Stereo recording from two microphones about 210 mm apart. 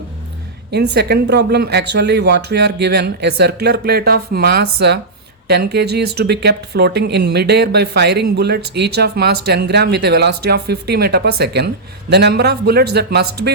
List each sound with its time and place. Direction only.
0.7 s speech: 50° right (ahead or behind)